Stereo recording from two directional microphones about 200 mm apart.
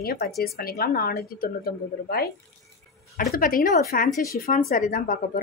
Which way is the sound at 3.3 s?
45° left (ahead or behind).